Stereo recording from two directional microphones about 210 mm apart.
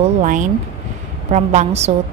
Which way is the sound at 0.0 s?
35° right (ahead or behind).